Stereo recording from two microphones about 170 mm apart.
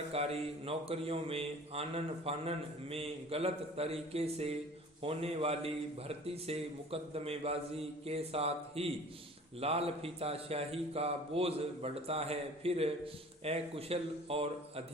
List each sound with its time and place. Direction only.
0.1 s speech: 35° right (ahead or behind)